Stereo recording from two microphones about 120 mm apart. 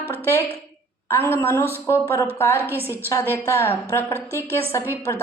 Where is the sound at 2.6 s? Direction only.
15° right (ahead or behind).